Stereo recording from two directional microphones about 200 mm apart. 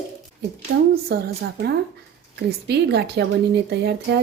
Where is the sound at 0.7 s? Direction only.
65° right (ahead or behind).